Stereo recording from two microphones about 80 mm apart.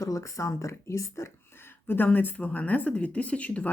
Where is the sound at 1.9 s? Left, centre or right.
Left.